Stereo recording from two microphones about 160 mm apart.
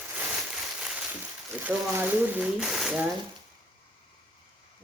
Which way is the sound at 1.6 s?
10° right (ahead or behind).